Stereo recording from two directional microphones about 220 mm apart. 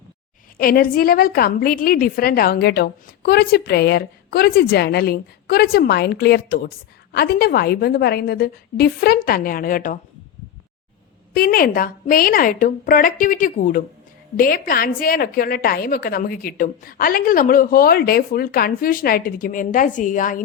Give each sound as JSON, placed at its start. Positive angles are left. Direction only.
{"t": 0.5, "sound": "a woman's voice", "side_deg": 40}
{"t": 11.3, "sound": "a woman's voice", "side_deg": 40}